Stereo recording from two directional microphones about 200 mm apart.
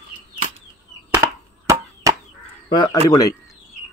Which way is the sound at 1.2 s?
15° right (ahead or behind).